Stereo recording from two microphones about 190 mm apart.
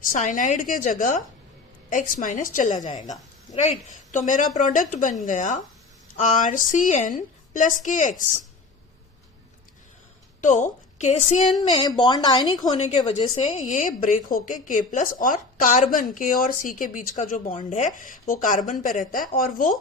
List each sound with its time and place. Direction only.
0.0 s a woman's voice: 45° left (ahead or behind)
10.4 s a woman's voice: 40° left (ahead or behind)
11.7 s speech: 25° left (ahead or behind)
12.7 s a woman's voice: 35° left (ahead or behind)